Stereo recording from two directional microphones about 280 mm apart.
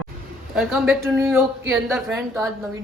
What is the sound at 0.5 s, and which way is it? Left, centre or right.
Speech, centre.